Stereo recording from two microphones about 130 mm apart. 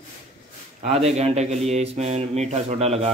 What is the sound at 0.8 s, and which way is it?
A man's voice, 55° right (ahead or behind).